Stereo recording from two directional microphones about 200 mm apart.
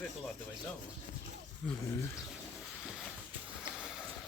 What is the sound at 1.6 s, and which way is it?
Speech, 5° left (ahead or behind).